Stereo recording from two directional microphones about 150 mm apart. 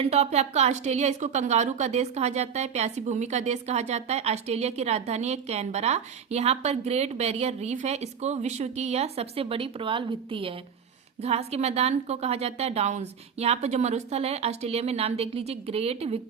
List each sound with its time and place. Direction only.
0.0 s speech: 45° right (ahead or behind)